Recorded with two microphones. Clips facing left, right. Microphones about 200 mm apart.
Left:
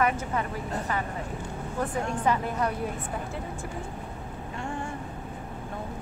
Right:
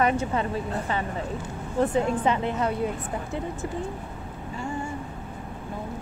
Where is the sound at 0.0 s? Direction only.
25° right (ahead or behind).